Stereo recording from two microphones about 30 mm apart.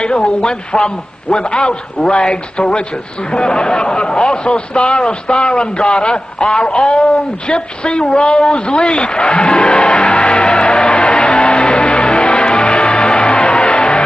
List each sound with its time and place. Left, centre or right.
0.2 s speech: left
10.3 s music: left